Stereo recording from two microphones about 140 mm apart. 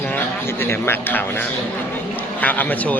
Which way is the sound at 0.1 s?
15° left (ahead or behind).